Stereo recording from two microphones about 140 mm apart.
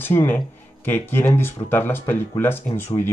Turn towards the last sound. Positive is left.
turn(degrees=15)  # may be behind; listen again after turning